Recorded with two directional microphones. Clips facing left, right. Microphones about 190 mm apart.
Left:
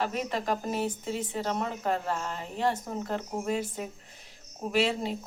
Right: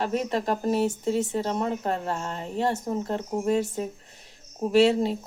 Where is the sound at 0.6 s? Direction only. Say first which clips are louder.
Right 7 dB; 35° right (ahead or behind).